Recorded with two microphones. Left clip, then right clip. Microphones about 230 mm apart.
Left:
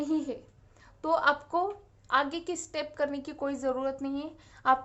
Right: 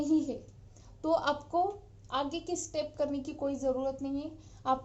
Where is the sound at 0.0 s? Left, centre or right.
Centre.